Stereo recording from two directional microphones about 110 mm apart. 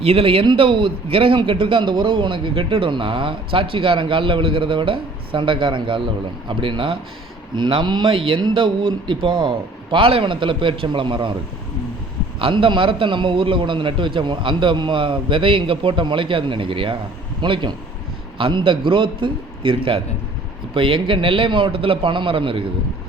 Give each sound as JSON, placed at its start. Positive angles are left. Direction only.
{"t": 0.0, "sound": "a man's voice", "side_deg": -60}
{"t": 12.4, "sound": "a man's voice", "side_deg": -50}